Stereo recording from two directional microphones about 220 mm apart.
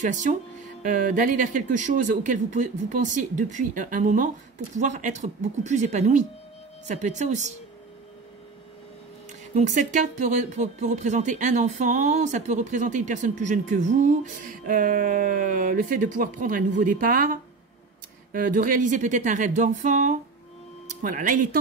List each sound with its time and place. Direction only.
0.0 s speech: 35° right (ahead or behind)
9.5 s speech: 35° right (ahead or behind)